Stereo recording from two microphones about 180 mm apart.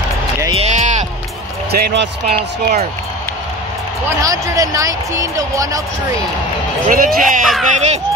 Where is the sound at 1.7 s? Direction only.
60° right (ahead or behind).